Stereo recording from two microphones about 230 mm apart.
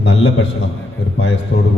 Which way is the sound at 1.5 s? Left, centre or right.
Left.